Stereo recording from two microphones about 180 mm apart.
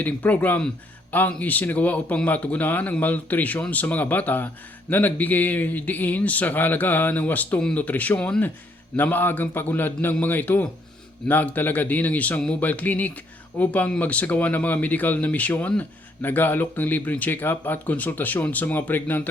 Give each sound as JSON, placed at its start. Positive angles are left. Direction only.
{"t": 0.0, "sound": "a man's voice", "side_deg": 10}